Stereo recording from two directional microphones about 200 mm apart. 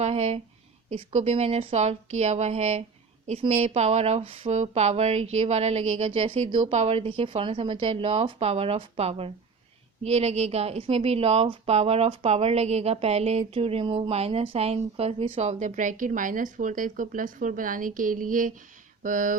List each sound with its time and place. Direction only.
0.0 s a woman's voice: 30° right (ahead or behind)